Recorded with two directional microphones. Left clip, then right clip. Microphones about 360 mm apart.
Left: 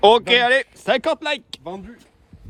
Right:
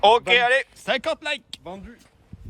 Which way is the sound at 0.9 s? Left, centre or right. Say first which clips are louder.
Left 7 dB; centre.